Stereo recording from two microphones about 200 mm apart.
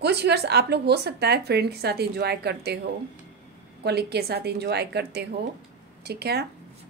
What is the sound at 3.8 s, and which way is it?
A woman's voice, 55° right (ahead or behind).